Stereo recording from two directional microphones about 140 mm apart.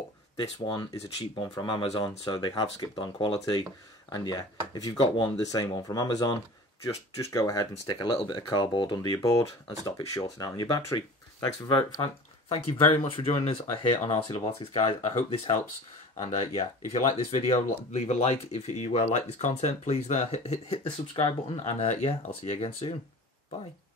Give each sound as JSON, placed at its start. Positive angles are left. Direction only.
{"t": 1.3, "sound": "speech", "side_deg": 35}
{"t": 12.0, "sound": "speech", "side_deg": 45}